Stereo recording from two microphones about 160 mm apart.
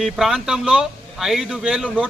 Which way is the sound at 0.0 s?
Centre (ahead or behind).